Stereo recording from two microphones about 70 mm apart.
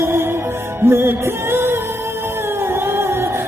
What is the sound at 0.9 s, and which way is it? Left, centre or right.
Music, right.